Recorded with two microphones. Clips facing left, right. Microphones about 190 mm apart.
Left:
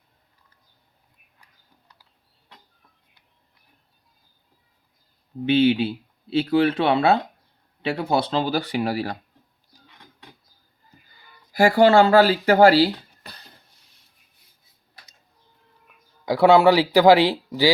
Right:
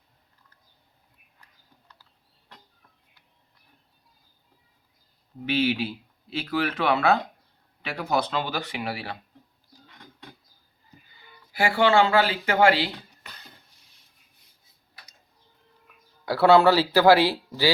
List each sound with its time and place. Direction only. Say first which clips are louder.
5.5 s speech: left 7 dB; 30° left (ahead or behind)
11.5 s speech: left 6 dB; 40° left (ahead or behind)
16.2 s speech: left 3 dB; 15° left (ahead or behind)